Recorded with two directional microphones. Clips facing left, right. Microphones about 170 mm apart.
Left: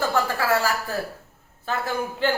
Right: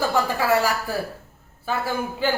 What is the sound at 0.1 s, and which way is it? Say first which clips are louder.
Speech: right 2 dB; 15° right (ahead or behind).